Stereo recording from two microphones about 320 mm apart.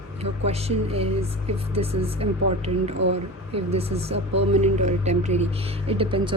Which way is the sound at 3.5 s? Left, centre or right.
Centre.